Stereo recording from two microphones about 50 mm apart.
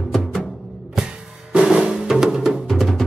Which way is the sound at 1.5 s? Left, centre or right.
Centre.